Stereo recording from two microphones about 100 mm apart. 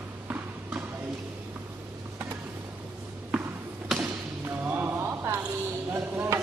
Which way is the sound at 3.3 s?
10° right (ahead or behind).